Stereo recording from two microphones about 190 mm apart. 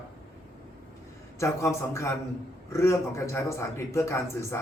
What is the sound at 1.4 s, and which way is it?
Speech, 15° left (ahead or behind).